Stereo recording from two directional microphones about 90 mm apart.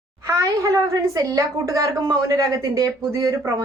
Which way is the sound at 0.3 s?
40° right (ahead or behind).